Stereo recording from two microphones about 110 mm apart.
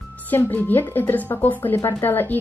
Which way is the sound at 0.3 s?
15° left (ahead or behind).